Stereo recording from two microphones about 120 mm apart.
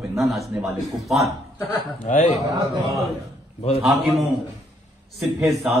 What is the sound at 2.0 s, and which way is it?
Speech, 90° left.